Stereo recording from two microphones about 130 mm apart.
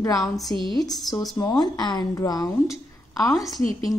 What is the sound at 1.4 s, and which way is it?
A woman's voice, 30° left (ahead or behind).